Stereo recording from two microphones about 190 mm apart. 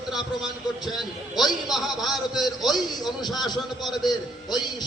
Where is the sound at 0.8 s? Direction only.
Centre (ahead or behind).